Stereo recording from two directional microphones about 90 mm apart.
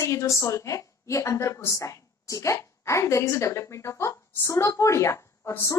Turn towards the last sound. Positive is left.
turn(degrees=35)  # may be behind; listen again after turning